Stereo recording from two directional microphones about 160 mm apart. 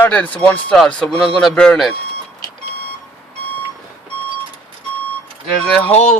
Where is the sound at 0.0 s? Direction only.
10° left (ahead or behind).